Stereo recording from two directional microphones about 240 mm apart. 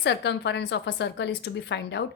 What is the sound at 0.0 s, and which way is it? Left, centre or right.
A woman's voice, left.